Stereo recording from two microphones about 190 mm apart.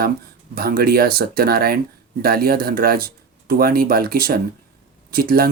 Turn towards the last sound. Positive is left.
turn(degrees=-50)  # may be behind; listen again after turning